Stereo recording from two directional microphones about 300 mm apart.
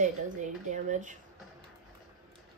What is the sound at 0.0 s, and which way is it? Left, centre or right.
Speech, right.